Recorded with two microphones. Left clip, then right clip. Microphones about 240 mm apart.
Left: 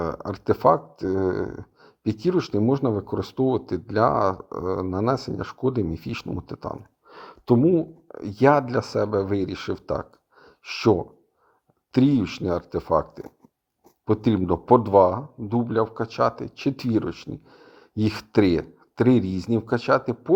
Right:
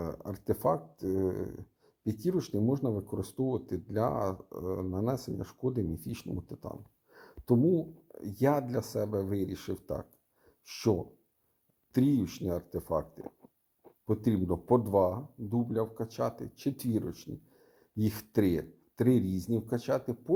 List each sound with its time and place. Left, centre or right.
0.3 s speech: centre